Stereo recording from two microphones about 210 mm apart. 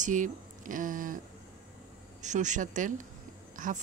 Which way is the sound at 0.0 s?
35° right (ahead or behind).